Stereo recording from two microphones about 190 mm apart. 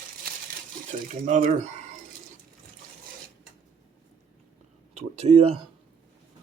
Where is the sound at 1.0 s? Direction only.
40° right (ahead or behind).